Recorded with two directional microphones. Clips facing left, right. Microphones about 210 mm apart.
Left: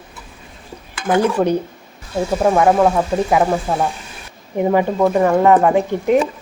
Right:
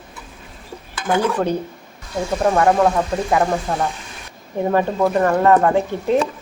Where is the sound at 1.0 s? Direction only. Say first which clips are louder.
Left 3 dB; 15° left (ahead or behind).